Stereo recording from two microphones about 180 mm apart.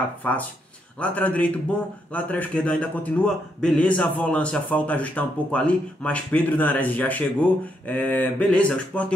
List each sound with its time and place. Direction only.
0.2 s a man's voice: 10° left (ahead or behind)